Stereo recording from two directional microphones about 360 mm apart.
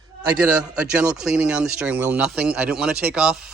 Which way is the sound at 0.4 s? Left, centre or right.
Centre.